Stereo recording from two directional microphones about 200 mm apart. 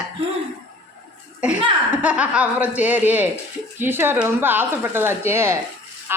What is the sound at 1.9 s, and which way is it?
Speech, 10° right (ahead or behind).